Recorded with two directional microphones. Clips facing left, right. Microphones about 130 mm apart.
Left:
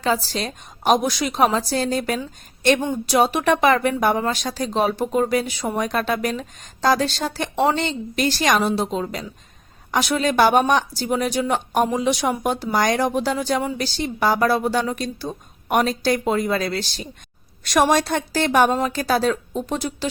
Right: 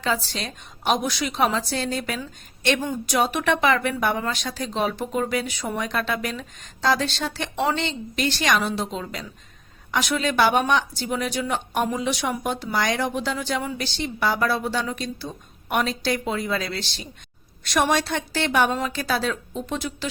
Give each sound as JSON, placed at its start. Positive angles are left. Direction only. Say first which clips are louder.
{"t": 0.0, "sound": "a woman's voice", "louder": "left 4 dB", "side_deg": 40}